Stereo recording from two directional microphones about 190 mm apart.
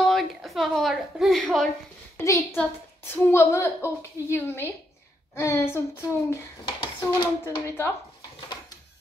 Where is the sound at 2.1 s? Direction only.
15° left (ahead or behind).